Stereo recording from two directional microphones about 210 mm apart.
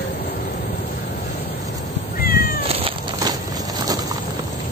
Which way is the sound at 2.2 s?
45° left (ahead or behind).